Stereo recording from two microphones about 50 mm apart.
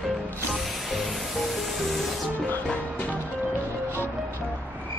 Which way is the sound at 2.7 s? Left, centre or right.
Left.